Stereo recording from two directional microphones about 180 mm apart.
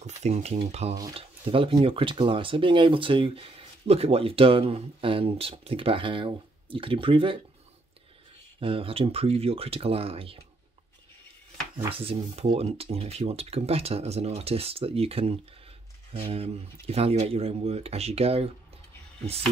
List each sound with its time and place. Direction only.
0.0 s a sound: 40° right (ahead or behind)
0.7 s speech: 35° right (ahead or behind)
8.5 s speech: 30° right (ahead or behind)
11.9 s speech: 30° right (ahead or behind)